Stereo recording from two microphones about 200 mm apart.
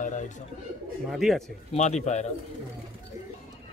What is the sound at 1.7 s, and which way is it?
Speech, 35° left (ahead or behind).